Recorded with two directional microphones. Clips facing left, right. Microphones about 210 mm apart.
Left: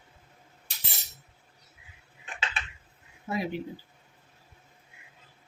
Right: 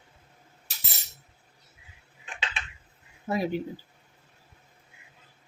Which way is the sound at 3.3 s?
40° right (ahead or behind).